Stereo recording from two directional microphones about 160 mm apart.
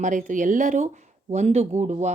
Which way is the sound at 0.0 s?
55° right (ahead or behind).